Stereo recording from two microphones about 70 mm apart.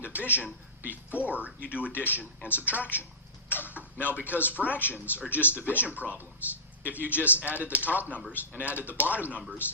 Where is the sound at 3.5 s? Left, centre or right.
Left.